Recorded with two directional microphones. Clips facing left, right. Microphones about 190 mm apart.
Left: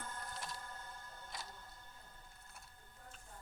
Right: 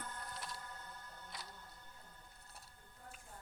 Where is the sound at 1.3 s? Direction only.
45° left (ahead or behind).